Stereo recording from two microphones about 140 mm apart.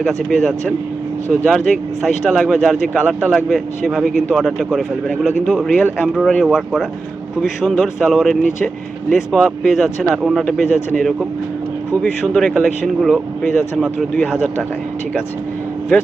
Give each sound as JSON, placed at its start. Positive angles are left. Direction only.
{"t": 0.0, "sound": "speech", "side_deg": 0}
{"t": 12.3, "sound": "speech", "side_deg": 5}